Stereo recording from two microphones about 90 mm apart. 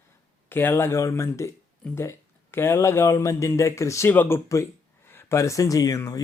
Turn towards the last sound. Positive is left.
turn(degrees=40)  # may be behind; listen again after turning